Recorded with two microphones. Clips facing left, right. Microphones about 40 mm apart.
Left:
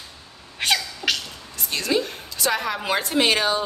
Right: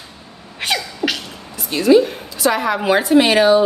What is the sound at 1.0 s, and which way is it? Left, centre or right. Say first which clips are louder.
Beatboxing: right 4 dB; right.